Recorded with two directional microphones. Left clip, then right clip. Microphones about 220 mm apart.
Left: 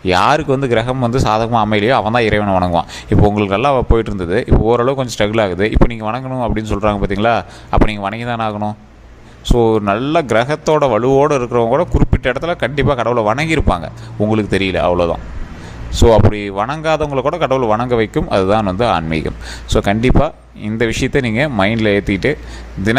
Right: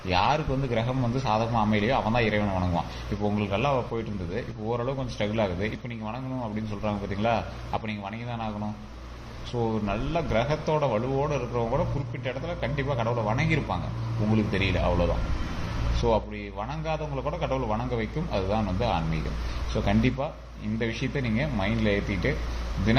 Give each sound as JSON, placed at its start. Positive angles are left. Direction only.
{"t": 0.0, "sound": "speech", "side_deg": 50}